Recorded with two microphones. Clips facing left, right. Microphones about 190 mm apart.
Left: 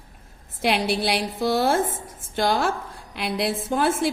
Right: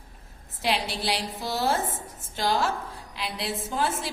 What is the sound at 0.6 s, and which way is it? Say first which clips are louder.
A woman's voice: left 6 dB; 60° left (ahead or behind).